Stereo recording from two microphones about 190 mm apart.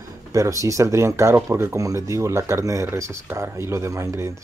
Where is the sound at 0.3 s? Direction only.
15° right (ahead or behind).